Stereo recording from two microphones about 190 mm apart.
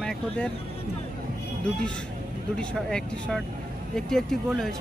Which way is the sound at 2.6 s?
5° left (ahead or behind).